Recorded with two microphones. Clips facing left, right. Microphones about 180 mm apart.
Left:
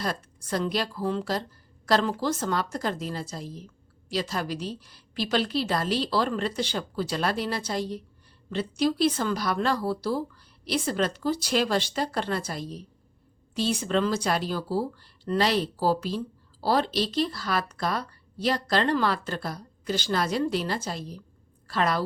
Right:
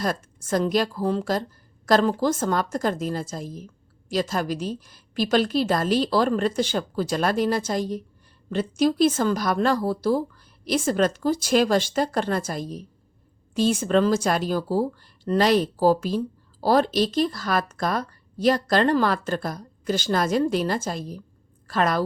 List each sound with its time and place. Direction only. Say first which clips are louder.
0.0 s speech: right 4 dB; 45° right (ahead or behind)